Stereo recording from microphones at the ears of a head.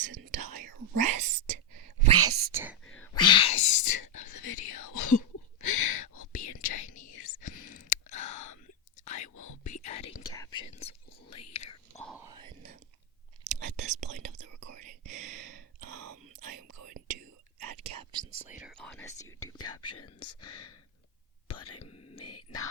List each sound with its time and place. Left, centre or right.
0.0 s whispering: right
3.0 s whispering: left
13.4 s whispering: right
19.6 s whispering: left